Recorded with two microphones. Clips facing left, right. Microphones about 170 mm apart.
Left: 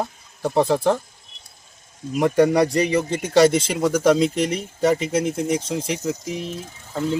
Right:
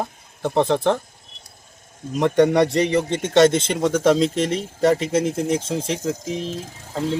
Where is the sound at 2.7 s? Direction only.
25° right (ahead or behind).